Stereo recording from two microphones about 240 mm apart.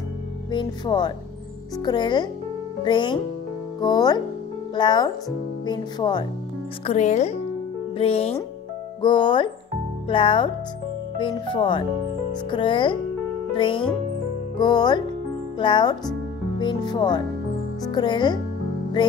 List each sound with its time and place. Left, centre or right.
0.5 s speech: centre
6.9 s speech: left